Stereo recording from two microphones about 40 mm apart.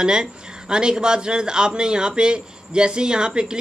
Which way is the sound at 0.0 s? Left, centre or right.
Right.